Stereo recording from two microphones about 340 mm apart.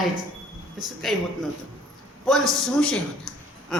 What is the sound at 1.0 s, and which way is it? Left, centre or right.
A woman's voice, centre.